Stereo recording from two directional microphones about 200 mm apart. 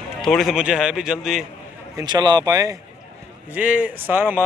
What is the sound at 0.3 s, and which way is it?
A man's voice, centre (ahead or behind).